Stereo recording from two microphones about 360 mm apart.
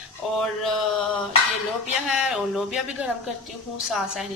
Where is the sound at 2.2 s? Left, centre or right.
Centre.